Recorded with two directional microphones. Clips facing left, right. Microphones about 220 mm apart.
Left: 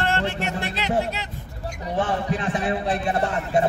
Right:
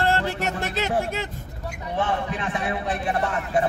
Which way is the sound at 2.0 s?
35° left (ahead or behind).